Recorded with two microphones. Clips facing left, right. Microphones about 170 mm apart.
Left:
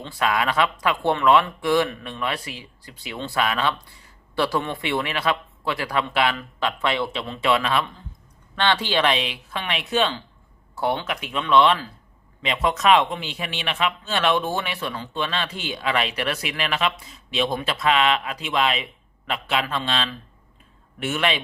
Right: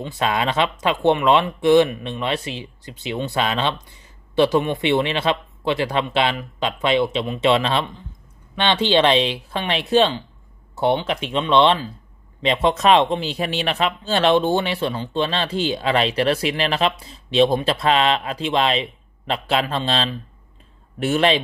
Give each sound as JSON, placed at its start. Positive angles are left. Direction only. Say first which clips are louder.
{"t": 0.2, "sound": "speech", "louder": "right 1 dB", "side_deg": -25}